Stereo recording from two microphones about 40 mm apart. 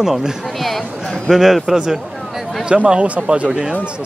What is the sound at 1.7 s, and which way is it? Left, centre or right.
Speech, centre.